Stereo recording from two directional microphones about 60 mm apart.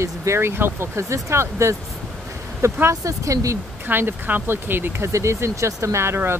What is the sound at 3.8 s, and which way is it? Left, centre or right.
Speech, right.